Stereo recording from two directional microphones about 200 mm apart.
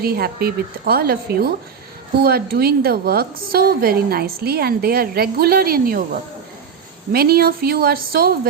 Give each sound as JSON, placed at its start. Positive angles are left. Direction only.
{"t": 0.0, "sound": "a woman's voice", "side_deg": -50}
{"t": 7.1, "sound": "a woman's voice", "side_deg": -50}